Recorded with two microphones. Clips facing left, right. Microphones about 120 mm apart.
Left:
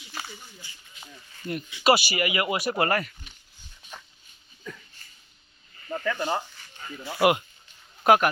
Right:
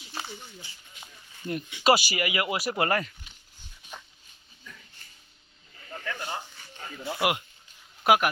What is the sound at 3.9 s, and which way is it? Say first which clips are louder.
Dog: even; 15° right (ahead or behind).